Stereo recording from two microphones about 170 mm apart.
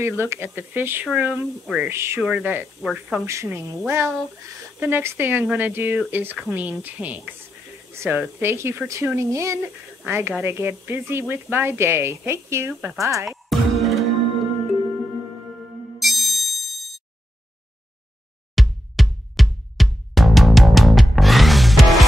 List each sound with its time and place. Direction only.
0.2 s speech: 15° right (ahead or behind)
1.0 s speech: centre (ahead or behind)
1.9 s speech: 15° right (ahead or behind)
3.3 s speech: 15° right (ahead or behind)
13.5 s music: centre (ahead or behind)
16.0 s ding: centre (ahead or behind)
18.5 s music: centre (ahead or behind)